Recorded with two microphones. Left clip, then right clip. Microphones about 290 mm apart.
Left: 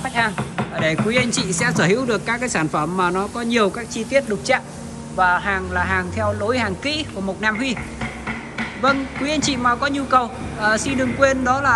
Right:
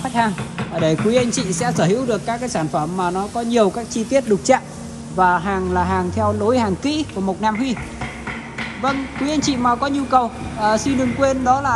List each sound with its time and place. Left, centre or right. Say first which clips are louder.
0.8 s speech: right 3 dB; centre
8.8 s speech: left 2 dB; centre